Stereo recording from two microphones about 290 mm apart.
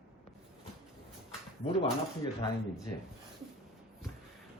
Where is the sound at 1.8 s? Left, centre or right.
Centre.